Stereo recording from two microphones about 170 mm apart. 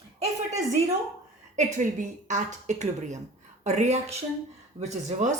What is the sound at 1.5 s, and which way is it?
Speech, 45° right (ahead or behind).